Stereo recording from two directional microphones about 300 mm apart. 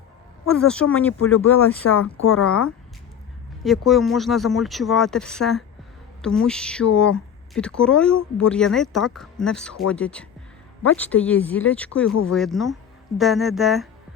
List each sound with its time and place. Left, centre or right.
0.4 s speech: centre
1.8 s speech: left
2.4 s speech: centre